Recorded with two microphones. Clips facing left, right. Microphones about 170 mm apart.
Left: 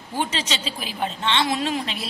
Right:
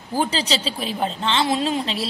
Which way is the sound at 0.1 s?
35° right (ahead or behind).